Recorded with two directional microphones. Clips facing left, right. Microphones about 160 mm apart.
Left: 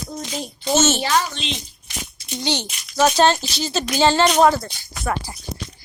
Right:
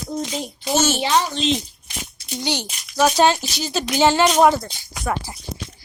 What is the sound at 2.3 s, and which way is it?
A child's voice, 10° right (ahead or behind).